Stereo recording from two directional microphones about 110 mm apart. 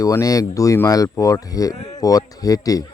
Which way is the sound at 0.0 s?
30° left (ahead or behind).